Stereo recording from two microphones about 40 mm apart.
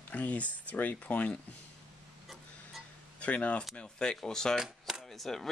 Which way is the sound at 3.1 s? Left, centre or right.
Left.